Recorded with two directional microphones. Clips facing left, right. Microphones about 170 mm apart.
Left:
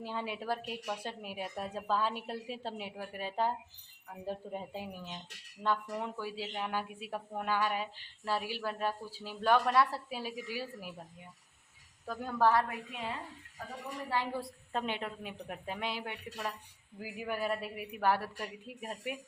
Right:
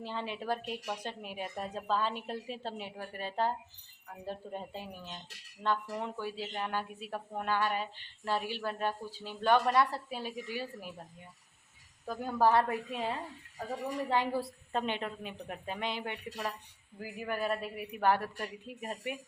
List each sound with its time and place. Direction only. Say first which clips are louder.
0.0 s a woman's voice: even; 10° left (ahead or behind)
12.0 s a woman's voice: right 1 dB; 5° right (ahead or behind)
12.5 s a woman's voice: right 3 dB; 35° right (ahead or behind)
14.3 s a woman's voice: right 3 dB; centre (ahead or behind)